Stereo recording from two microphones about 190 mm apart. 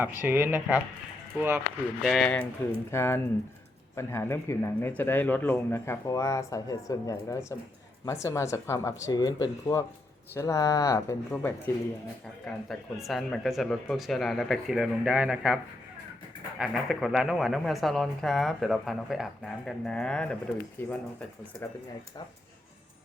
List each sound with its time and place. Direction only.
0.2 s speech: 10° right (ahead or behind)
2.0 s speech: 5° left (ahead or behind)
16.6 s speech: centre (ahead or behind)